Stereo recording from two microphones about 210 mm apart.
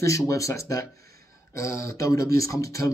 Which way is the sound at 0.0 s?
15° left (ahead or behind).